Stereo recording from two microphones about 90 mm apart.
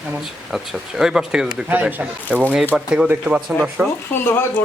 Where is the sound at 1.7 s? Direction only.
20° right (ahead or behind).